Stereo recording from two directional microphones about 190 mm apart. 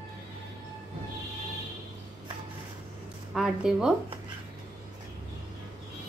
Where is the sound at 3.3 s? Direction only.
Centre (ahead or behind).